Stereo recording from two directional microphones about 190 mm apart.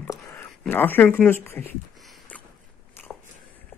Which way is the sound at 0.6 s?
10° left (ahead or behind).